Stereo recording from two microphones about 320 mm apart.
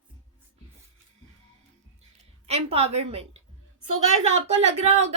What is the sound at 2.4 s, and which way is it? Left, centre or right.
A woman's voice, centre.